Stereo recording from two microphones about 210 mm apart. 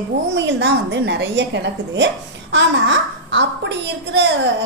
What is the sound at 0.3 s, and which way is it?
A woman's voice, 55° right (ahead or behind).